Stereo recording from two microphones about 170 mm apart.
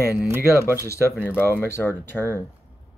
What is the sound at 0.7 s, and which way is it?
Speech, 15° left (ahead or behind).